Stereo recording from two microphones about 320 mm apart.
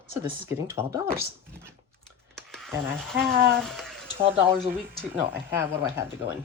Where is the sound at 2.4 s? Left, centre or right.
Centre.